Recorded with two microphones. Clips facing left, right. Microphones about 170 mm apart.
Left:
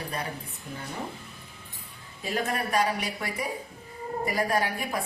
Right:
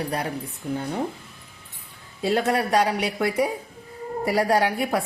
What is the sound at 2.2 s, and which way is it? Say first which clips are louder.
A woman's voice: right 8 dB; 80° right.